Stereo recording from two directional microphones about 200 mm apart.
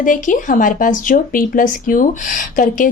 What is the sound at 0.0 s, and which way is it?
A woman's voice, 40° left (ahead or behind).